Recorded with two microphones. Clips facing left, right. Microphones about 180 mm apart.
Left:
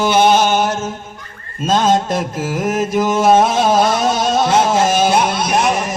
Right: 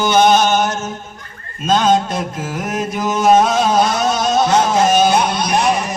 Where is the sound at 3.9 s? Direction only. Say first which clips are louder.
Left 1 dB; 30° left (ahead or behind).